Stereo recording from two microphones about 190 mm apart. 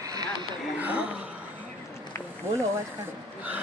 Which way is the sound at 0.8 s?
10° right (ahead or behind).